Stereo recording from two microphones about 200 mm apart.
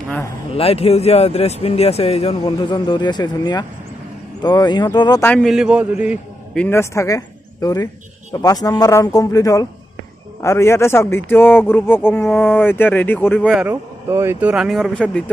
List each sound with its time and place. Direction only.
0.5 s speech: 30° left (ahead or behind)
5.2 s speech: 5° left (ahead or behind)
6.5 s a man's voice: 10° left (ahead or behind)
13.5 s speech: 10° right (ahead or behind)